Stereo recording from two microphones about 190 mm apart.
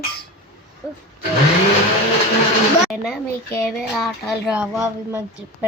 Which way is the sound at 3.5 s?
5° left (ahead or behind).